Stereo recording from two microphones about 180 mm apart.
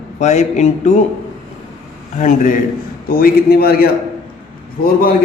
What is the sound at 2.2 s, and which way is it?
A man's voice, 45° left (ahead or behind).